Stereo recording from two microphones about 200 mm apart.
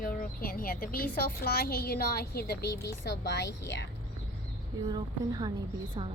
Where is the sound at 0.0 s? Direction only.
45° left (ahead or behind).